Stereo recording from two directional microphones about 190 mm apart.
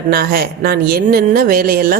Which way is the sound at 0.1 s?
50° right (ahead or behind).